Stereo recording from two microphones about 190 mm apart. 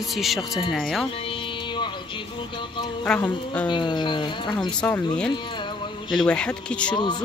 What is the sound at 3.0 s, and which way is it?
Speech, 5° left (ahead or behind).